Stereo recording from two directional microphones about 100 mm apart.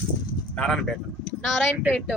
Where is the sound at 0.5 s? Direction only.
10° left (ahead or behind).